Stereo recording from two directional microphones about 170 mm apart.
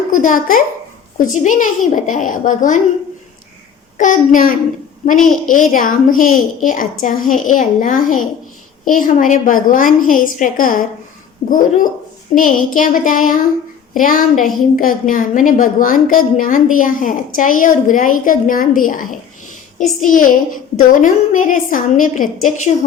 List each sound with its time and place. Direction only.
0.1 s a woman's voice: 50° left (ahead or behind)
3.9 s a woman's voice: 50° left (ahead or behind)